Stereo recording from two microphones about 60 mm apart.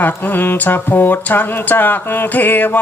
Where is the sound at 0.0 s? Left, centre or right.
Left.